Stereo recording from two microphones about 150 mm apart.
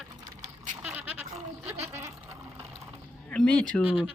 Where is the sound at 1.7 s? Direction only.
50° right (ahead or behind).